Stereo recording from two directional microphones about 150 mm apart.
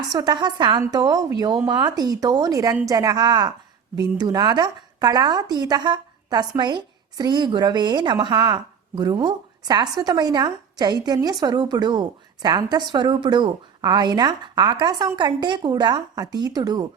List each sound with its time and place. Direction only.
0.1 s a woman's voice: 25° right (ahead or behind)